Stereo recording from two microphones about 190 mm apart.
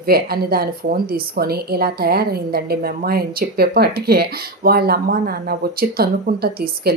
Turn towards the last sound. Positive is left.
turn(degrees=-55)  # may be behind; listen again after turning